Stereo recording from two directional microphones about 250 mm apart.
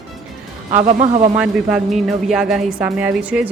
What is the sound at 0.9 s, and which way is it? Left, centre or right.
Speech, right.